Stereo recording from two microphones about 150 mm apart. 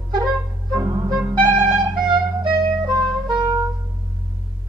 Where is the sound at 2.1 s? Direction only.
30° right (ahead or behind).